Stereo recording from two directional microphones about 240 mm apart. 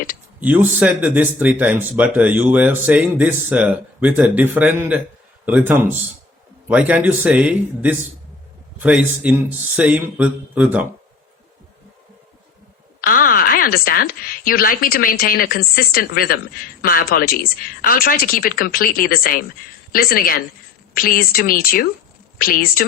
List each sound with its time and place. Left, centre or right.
0.3 s a man's voice: centre
13.0 s a woman's voice: left